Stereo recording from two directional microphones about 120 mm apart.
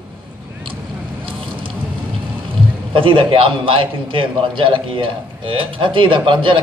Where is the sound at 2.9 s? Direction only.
45° right (ahead or behind).